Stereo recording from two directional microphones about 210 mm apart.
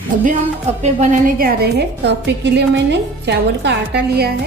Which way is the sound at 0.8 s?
45° right (ahead or behind).